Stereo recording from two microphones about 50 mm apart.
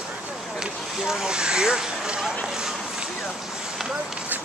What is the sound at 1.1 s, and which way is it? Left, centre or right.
Speech, centre.